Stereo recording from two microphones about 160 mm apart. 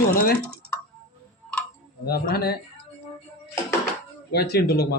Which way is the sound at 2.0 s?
75° left (ahead or behind).